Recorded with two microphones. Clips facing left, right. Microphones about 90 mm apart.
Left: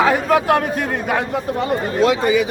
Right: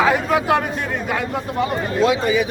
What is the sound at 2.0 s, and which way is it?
Speech, 60° left (ahead or behind).